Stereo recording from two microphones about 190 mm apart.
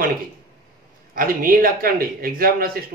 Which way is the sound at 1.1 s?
45° right (ahead or behind).